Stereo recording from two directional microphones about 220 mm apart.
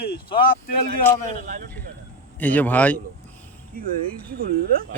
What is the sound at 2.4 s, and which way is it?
Speech, 10° left (ahead or behind).